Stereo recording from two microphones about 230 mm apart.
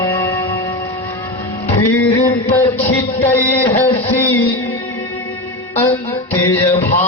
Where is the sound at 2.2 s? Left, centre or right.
Centre.